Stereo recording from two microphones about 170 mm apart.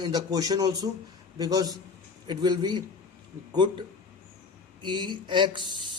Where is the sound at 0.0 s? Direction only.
20° right (ahead or behind).